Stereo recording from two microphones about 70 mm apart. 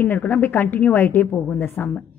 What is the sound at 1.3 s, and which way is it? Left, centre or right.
Speech, centre.